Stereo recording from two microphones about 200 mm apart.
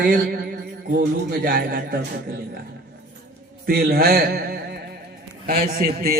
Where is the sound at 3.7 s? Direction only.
50° right (ahead or behind).